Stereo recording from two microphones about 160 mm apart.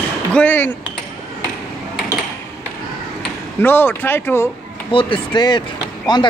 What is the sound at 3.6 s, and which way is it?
Speech, 15° left (ahead or behind).